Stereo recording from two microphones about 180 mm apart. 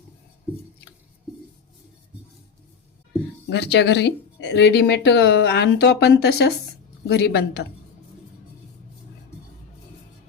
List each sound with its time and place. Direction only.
3.5 s speech: 75° left (ahead or behind)